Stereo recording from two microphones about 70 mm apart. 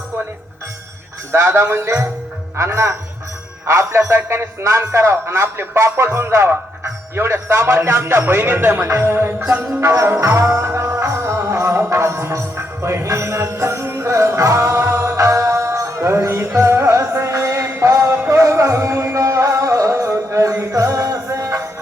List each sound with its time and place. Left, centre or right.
1.3 s speech: right
2.6 s music: right
3.7 s speech: right
10.1 s music: right